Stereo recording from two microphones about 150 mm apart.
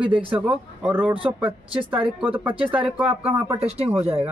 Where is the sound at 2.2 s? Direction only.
35° right (ahead or behind).